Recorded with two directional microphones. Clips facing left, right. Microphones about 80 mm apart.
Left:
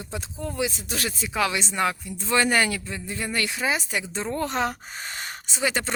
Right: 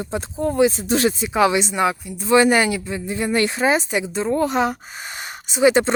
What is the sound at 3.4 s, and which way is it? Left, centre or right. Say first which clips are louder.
Speech: right 8 dB; right.